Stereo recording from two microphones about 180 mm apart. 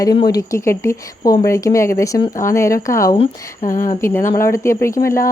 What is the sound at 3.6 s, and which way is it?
Speech, 50° left (ahead or behind).